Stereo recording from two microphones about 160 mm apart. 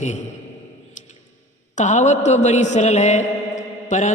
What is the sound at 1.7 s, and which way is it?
Mantra, 50° left (ahead or behind).